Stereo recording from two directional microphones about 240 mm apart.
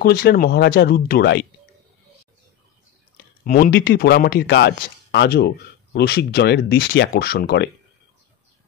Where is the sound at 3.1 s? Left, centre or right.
Left.